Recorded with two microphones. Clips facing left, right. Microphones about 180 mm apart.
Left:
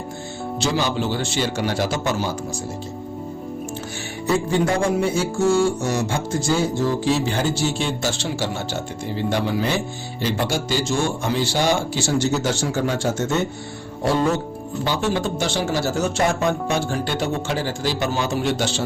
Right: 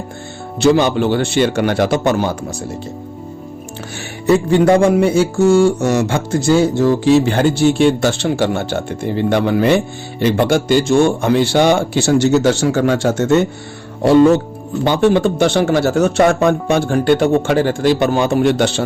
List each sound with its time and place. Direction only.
0.6 s music: 55° right (ahead or behind)
4.3 s music: 65° right (ahead or behind)
14.8 s music: 60° right (ahead or behind)